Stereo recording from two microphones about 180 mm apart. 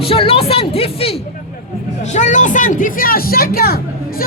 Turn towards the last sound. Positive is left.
turn(degrees=55)  # may be behind; listen again after turning